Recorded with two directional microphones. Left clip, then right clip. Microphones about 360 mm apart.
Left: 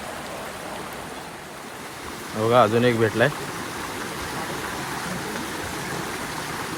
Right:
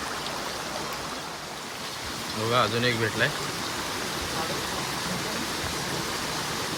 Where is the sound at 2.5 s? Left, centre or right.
Centre.